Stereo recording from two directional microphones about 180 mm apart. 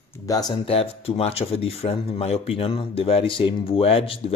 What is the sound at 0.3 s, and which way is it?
Speech, 20° left (ahead or behind).